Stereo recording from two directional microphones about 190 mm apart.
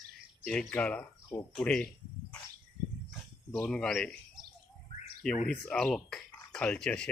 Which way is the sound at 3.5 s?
5° left (ahead or behind).